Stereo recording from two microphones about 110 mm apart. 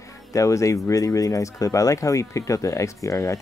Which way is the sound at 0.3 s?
30° left (ahead or behind).